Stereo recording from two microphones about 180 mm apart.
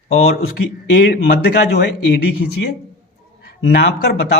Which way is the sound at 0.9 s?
70° left (ahead or behind).